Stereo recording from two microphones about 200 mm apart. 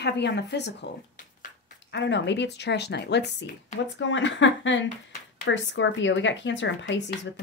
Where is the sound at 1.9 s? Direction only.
60° left (ahead or behind).